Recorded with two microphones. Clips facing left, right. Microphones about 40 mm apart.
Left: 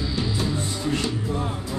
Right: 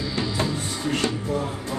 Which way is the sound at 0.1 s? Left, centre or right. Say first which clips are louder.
Right 2 dB; right.